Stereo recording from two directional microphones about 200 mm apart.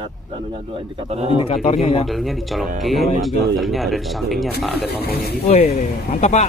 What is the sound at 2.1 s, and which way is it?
Speech, centre (ahead or behind).